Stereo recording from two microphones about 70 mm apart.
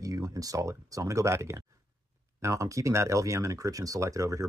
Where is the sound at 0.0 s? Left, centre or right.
Right.